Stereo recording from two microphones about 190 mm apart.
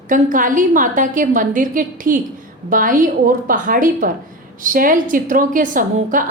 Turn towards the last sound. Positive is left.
turn(degrees=-45)  # may be behind; listen again after turning